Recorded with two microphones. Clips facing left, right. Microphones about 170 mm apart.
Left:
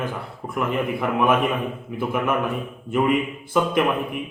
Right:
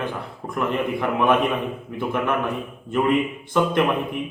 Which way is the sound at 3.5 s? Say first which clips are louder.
Right 1 dB; 5° left (ahead or behind).